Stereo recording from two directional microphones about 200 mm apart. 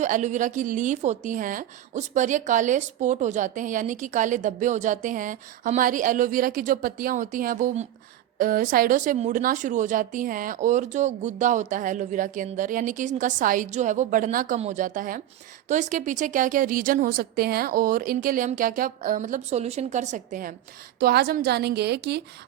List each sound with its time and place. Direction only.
0.0 s a woman's voice: 35° right (ahead or behind); by 22.2 s 55° right (ahead or behind)